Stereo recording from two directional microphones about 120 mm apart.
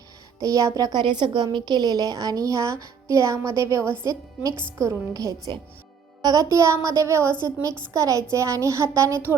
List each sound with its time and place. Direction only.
0.4 s a woman's voice: 30° right (ahead or behind)